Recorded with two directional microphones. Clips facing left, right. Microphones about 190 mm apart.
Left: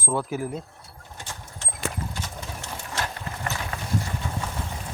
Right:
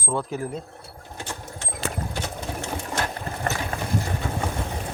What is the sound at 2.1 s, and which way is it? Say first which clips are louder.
Sewing machine: right 5 dB; 65° right (ahead or behind).